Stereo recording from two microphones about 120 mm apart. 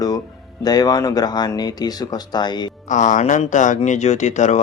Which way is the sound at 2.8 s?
90° left.